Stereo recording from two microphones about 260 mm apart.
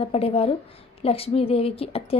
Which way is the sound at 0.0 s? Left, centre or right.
Left.